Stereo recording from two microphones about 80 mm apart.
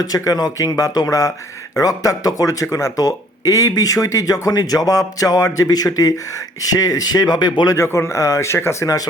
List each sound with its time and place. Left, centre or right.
0.0 s speech: left
7.7 s speech: left